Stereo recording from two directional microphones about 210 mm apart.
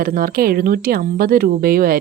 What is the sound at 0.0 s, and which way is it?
Speech, 45° right (ahead or behind).